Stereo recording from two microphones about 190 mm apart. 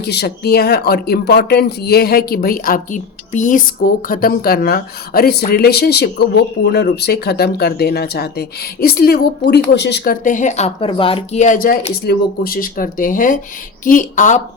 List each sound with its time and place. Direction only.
0.0 s speech: 60° left (ahead or behind); by 14.4 s 40° left (ahead or behind)